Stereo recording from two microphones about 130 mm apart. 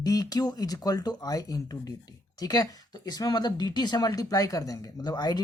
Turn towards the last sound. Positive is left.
turn(degrees=30)  # may be behind; listen again after turning